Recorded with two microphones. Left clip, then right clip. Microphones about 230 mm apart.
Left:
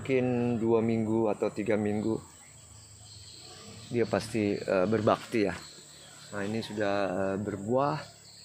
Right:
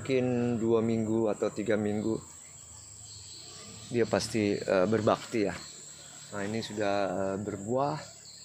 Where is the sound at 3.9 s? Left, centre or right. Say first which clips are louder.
Right 1 dB; centre.